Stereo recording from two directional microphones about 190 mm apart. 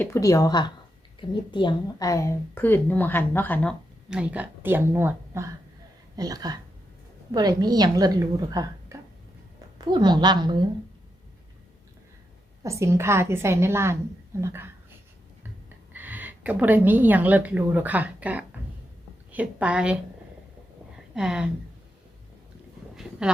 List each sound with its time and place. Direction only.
0.0 s a woman's voice: 15° left (ahead or behind)
4.1 s a woman's voice: 5° right (ahead or behind); by 10.5 s 20° right (ahead or behind)
12.6 s speech: 15° right (ahead or behind)
15.9 s a woman's voice: 10° right (ahead or behind)
21.2 s speech: 5° right (ahead or behind)